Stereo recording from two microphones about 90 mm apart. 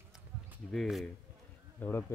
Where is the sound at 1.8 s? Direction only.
20° left (ahead or behind).